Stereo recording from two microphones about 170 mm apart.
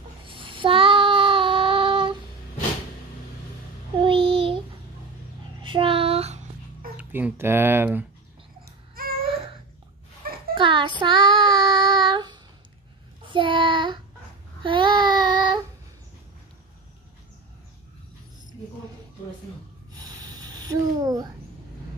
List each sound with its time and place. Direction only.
0.3 s child singing: 30° right (ahead or behind)
4.0 s child singing: 30° right (ahead or behind)
5.6 s child singing: 30° right (ahead or behind)
7.0 s speech: 10° right (ahead or behind)
10.5 s child singing: 30° right (ahead or behind)
19.9 s a sound: 20° right (ahead or behind)